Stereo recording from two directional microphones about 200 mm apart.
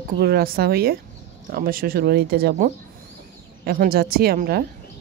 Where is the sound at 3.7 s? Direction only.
50° right (ahead or behind).